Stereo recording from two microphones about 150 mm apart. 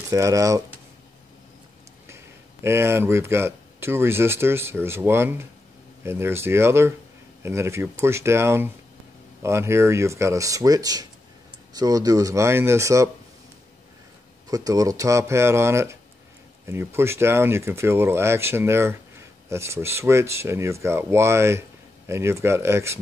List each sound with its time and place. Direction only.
0.1 s speech: 20° right (ahead or behind)
2.0 s speech: 15° right (ahead or behind)
14.5 s speech: 25° right (ahead or behind)